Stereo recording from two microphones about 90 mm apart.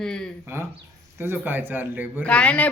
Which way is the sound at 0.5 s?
25° right (ahead or behind).